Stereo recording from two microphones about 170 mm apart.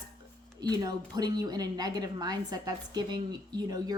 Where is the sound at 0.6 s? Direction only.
20° right (ahead or behind).